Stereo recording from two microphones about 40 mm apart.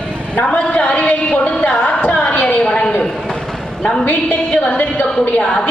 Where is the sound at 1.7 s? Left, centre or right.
Left.